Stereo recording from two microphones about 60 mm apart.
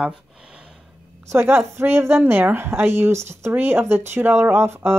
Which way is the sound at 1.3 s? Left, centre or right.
Right.